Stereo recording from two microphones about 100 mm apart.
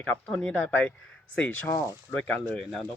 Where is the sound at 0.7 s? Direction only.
20° left (ahead or behind).